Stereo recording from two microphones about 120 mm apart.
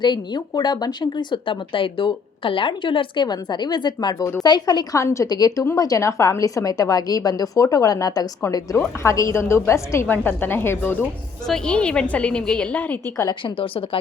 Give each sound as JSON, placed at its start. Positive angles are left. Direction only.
{"t": 0.0, "sound": "a woman's voice", "side_deg": 35}
{"t": 11.4, "sound": "a woman's voice", "side_deg": 5}
{"t": 13.4, "sound": "a woman's voice", "side_deg": 50}